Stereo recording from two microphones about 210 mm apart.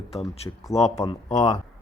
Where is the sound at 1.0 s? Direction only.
20° left (ahead or behind).